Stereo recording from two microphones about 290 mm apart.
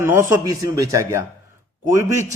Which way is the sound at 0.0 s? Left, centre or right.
Centre.